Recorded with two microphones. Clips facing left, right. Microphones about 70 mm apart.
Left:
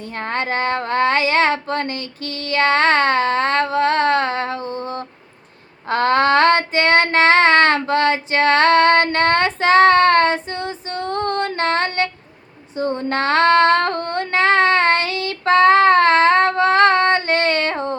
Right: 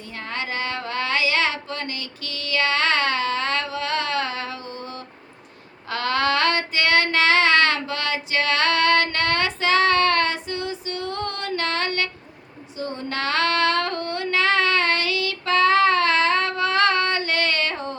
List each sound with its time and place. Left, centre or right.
0.2 s child singing: left
12.7 s female singing: left